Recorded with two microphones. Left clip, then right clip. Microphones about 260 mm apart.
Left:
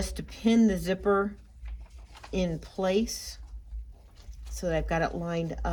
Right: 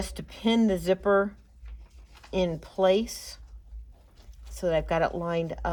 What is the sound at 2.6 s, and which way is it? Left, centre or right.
Speech, right.